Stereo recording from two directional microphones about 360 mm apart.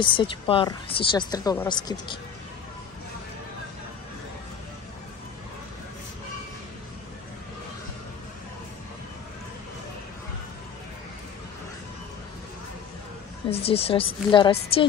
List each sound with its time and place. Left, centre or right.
0.0 s speech: centre
13.5 s speech: centre